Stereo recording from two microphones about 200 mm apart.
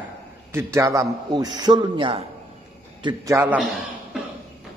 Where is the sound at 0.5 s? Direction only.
15° right (ahead or behind).